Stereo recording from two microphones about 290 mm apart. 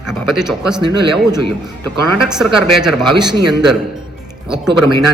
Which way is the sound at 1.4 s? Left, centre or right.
Right.